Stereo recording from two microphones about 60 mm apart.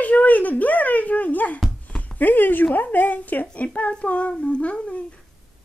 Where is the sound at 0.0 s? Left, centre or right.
Left.